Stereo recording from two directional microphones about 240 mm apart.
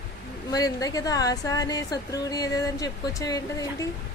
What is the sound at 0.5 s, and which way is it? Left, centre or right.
Speech, centre.